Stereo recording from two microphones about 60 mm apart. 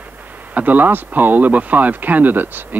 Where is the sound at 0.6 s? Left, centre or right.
Right.